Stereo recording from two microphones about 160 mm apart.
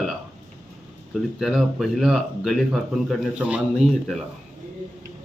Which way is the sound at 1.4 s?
Centre (ahead or behind).